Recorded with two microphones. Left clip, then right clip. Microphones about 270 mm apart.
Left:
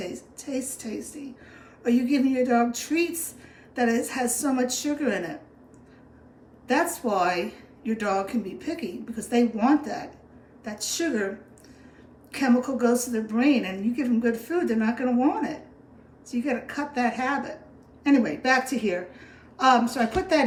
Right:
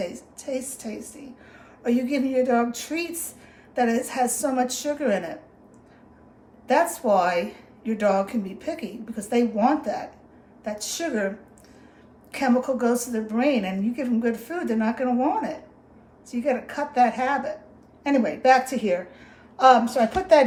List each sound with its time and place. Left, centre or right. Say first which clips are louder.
0.0 s a woman's voice: right 4 dB; centre
6.7 s a woman's voice: right 4 dB; centre
12.3 s a woman's voice: right 2 dB; centre